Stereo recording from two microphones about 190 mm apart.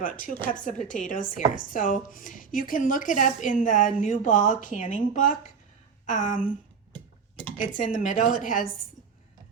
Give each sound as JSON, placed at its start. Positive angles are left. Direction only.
{"t": 0.0, "sound": "speech", "side_deg": 45}
{"t": 7.6, "sound": "speech", "side_deg": 45}